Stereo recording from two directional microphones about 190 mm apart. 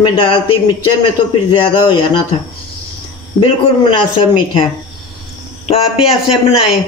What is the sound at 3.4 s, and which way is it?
Speech, 25° left (ahead or behind).